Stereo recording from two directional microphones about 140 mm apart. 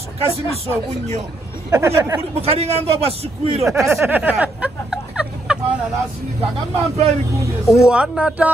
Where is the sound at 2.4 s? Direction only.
45° right (ahead or behind).